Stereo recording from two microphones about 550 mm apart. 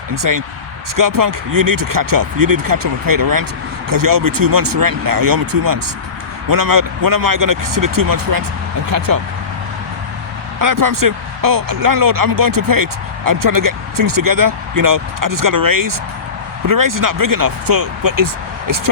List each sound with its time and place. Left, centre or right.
0.1 s speech: right
10.6 s speech: right